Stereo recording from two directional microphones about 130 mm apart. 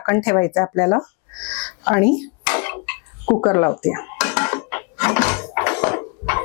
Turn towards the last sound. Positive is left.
turn(degrees=20)  # may be behind; listen again after turning